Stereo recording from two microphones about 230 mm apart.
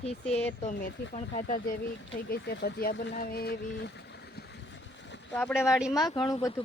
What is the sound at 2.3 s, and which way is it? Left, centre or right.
Speech, left.